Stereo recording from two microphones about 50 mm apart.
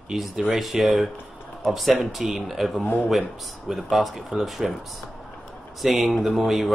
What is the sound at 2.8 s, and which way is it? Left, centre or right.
Speech, left.